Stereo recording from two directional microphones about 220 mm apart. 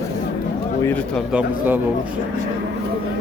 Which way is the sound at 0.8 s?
5° left (ahead or behind).